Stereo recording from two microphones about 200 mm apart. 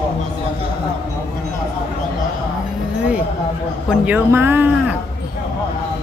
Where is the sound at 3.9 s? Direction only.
10° right (ahead or behind).